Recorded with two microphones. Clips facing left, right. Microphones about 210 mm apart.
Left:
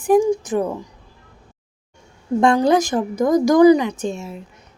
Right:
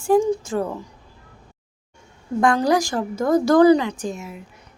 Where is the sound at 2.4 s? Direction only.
25° left (ahead or behind).